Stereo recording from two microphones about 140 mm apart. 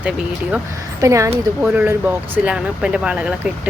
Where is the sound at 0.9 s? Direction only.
20° right (ahead or behind).